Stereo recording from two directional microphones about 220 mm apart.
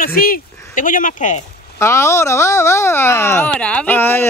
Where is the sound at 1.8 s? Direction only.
10° left (ahead or behind).